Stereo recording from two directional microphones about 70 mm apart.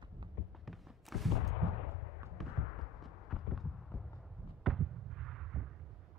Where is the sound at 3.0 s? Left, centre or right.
Centre.